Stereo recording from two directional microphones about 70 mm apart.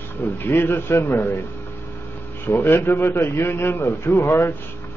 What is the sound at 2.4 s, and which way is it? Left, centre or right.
A man's voice, left.